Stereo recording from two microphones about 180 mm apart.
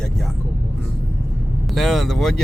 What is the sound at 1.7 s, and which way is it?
Speech, centre (ahead or behind).